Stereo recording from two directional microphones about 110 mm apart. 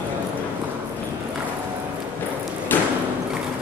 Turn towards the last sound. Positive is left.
turn(degrees=15)  # may be behind; listen again after turning